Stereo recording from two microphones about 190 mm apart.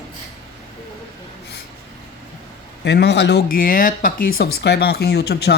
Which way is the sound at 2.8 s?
65° left (ahead or behind).